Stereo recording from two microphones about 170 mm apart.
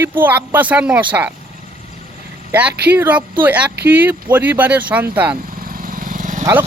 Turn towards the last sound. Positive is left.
turn(degrees=-50)  # may be behind; listen again after turning